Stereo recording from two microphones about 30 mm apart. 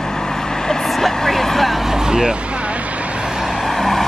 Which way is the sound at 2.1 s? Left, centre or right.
Right.